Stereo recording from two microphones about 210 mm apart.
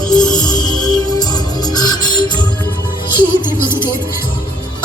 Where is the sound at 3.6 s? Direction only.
10° right (ahead or behind).